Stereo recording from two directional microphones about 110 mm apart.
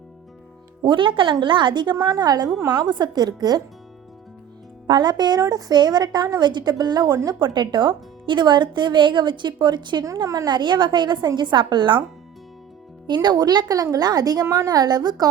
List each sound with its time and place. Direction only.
0.8 s a woman's voice: 50° right (ahead or behind)
4.9 s a woman's voice: 40° right (ahead or behind)
13.1 s a woman's voice: 40° right (ahead or behind)